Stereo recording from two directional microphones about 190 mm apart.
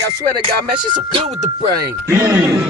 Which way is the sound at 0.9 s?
30° right (ahead or behind).